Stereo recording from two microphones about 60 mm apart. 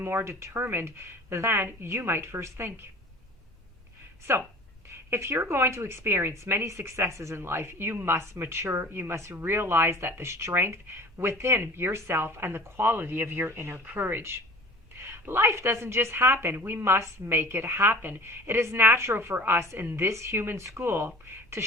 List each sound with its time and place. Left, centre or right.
0.0 s speech: right
4.9 s speech: right